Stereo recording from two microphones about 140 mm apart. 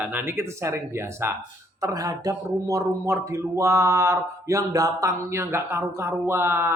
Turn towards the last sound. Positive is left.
turn(degrees=-15)  # may be behind; listen again after turning